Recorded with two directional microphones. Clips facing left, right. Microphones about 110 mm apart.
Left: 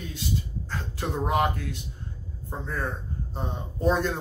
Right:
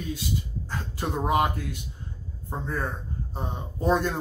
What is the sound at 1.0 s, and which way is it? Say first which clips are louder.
Speech: right 1 dB; 15° right (ahead or behind).